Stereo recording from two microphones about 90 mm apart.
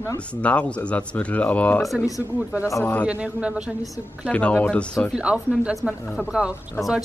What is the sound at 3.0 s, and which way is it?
Speech, 15° right (ahead or behind).